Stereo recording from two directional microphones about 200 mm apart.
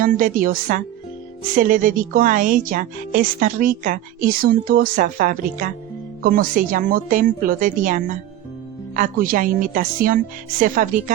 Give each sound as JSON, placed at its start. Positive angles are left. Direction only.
{"t": 0.0, "sound": "speech", "side_deg": -45}